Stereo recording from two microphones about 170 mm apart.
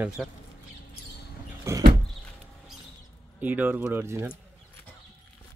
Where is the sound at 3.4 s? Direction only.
10° right (ahead or behind).